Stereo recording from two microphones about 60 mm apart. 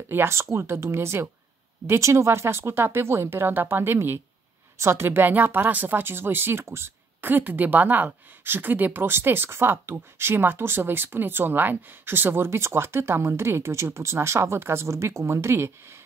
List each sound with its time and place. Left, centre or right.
0.1 s speech: right
4.7 s speech: right